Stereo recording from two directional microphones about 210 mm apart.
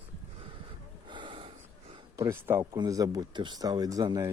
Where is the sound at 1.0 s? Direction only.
20° right (ahead or behind).